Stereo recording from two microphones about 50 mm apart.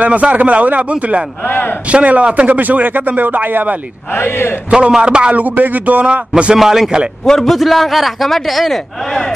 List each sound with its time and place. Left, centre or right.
0.0 s speech: right
1.4 s speech: left
1.9 s speech: right
4.1 s a man's voice: left
4.6 s speech: centre
5.3 s speech: right
6.3 s a man's voice: centre
7.2 s a man's voice: centre